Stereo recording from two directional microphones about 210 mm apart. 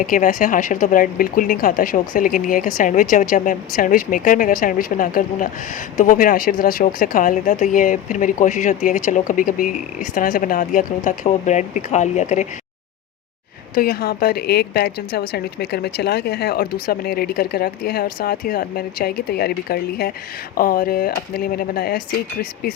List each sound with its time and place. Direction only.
0.0 s speech: 40° left (ahead or behind)
13.7 s speech: 45° left (ahead or behind)